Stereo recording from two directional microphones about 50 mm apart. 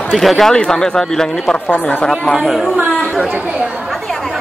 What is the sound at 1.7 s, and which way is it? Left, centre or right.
Speech, left.